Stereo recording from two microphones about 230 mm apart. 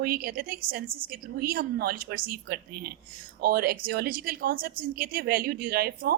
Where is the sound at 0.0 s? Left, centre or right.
Right.